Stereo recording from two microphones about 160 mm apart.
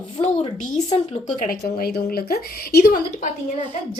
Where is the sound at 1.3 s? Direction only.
60° left (ahead or behind).